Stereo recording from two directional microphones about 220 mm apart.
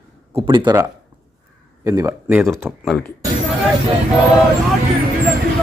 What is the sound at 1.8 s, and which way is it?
Speech, 15° right (ahead or behind).